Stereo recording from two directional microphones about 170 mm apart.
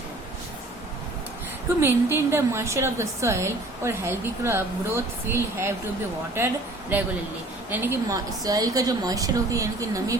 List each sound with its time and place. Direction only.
1.8 s a woman's voice: 15° right (ahead or behind)
6.9 s a woman's voice: 10° right (ahead or behind)